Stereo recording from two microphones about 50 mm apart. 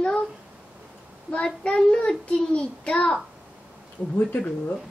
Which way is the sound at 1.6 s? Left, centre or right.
Centre.